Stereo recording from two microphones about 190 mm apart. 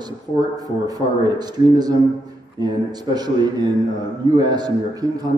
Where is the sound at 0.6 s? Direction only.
20° right (ahead or behind).